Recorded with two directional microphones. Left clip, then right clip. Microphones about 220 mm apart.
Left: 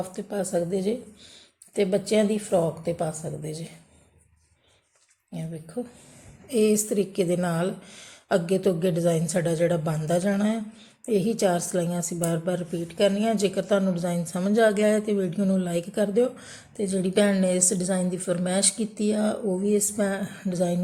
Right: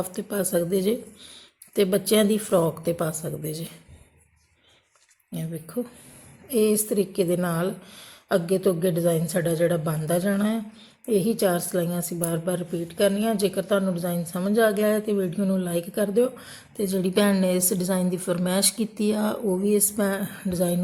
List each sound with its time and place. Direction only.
0.0 s speech: 25° right (ahead or behind)
5.3 s speech: 25° right (ahead or behind)
6.5 s a woman's voice: 10° right (ahead or behind)